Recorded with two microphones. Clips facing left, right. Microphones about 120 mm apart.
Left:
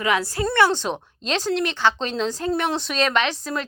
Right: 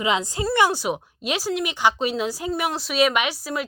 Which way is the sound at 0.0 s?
20° right (ahead or behind).